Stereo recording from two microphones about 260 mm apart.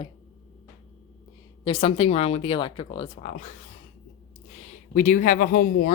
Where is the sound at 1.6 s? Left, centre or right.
Left.